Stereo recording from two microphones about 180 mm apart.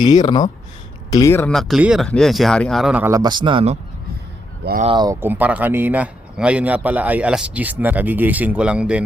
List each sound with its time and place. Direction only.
0.0 s speech: 25° left (ahead or behind); by 3.8 s 30° right (ahead or behind)
4.6 s speech: 65° right (ahead or behind)
4.9 s speech: 15° right (ahead or behind)